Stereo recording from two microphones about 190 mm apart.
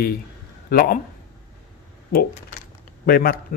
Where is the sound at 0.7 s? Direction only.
50° left (ahead or behind).